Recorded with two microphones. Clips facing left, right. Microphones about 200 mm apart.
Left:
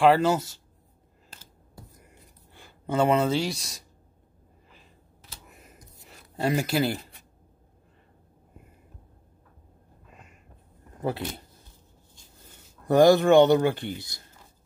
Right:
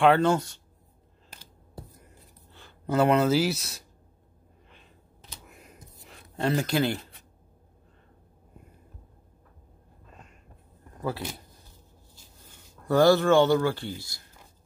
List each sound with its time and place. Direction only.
0.0 s speech: 5° left (ahead or behind)
2.0 s a sound: 10° left (ahead or behind)
2.9 s speech: centre (ahead or behind)
5.5 s a sound: centre (ahead or behind)
11.0 s speech: 25° left (ahead or behind)
12.8 s speech: 20° left (ahead or behind)